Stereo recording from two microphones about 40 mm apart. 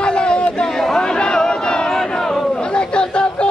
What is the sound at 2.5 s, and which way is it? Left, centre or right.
Chatter, left.